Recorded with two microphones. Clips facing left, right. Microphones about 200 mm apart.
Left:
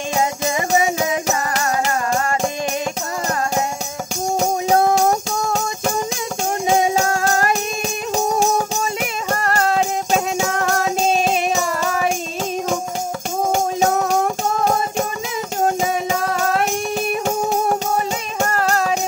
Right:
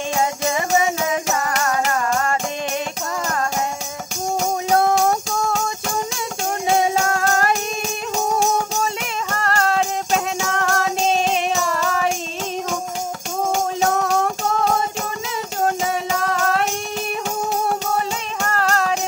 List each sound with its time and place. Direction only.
0.2 s music: 20° left (ahead or behind)
0.8 s music: 35° left (ahead or behind)
9.4 s music: 15° left (ahead or behind)
13.8 s music: 15° left (ahead or behind)
14.2 s music: 50° left (ahead or behind)
18.5 s music: 10° left (ahead or behind)